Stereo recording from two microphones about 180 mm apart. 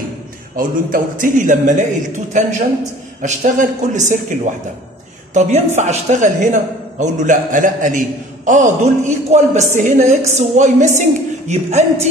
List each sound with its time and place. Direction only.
0.6 s a man's voice: 50° right (ahead or behind)